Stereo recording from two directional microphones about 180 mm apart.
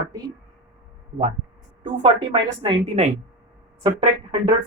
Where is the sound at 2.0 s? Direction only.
30° right (ahead or behind).